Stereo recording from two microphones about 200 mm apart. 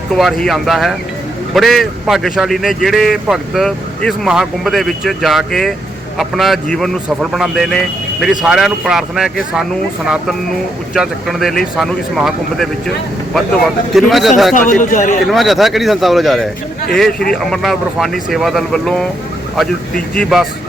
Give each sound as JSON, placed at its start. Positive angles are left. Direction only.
{"t": 0.2, "sound": "speech", "side_deg": 0}
{"t": 10.9, "sound": "speech", "side_deg": 0}
{"t": 13.9, "sound": "speech", "side_deg": 0}
{"t": 14.7, "sound": "a man's voice", "side_deg": 40}
{"t": 15.3, "sound": "speech", "side_deg": 0}